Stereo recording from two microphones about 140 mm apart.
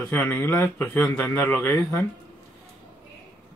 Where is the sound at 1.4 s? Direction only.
15° left (ahead or behind).